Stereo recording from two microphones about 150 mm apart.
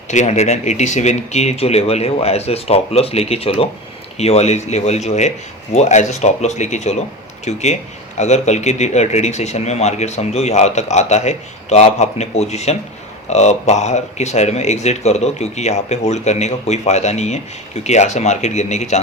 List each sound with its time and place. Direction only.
0.1 s speech: 50° left (ahead or behind)